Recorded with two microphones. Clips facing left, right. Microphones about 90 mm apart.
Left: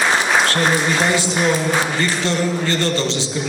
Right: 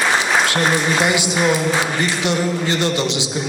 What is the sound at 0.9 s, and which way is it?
A man's voice, 15° right (ahead or behind).